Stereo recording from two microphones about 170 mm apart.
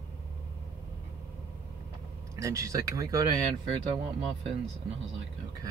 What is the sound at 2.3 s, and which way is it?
Speech, 20° right (ahead or behind).